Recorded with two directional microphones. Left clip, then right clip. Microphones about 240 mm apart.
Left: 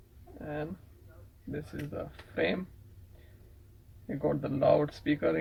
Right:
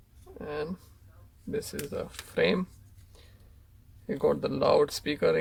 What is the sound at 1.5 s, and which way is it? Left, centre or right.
Speech, right.